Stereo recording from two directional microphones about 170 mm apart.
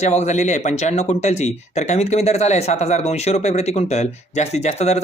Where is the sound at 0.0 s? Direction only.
40° left (ahead or behind).